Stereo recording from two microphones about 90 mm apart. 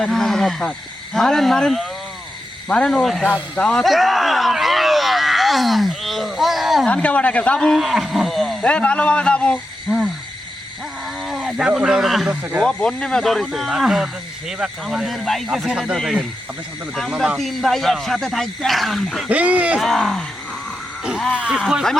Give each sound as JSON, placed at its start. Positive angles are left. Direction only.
{"t": 0.0, "sound": "wild animals", "side_deg": 5}
{"t": 1.1, "sound": "a man's voice", "side_deg": 5}
{"t": 3.8, "sound": "a sound", "side_deg": 0}
{"t": 6.8, "sound": "speech", "side_deg": 15}
{"t": 8.6, "sound": "a man's voice", "side_deg": 10}
{"t": 11.2, "sound": "speech", "side_deg": -5}
{"t": 12.3, "sound": "speech", "side_deg": -15}
{"t": 12.6, "sound": "speech", "side_deg": 10}
{"t": 17.3, "sound": "speech", "side_deg": 0}
{"t": 19.3, "sound": "speech", "side_deg": -15}
{"t": 19.8, "sound": "speech", "side_deg": 5}
{"t": 21.0, "sound": "a sound", "side_deg": -10}
{"t": 21.3, "sound": "speech", "side_deg": -10}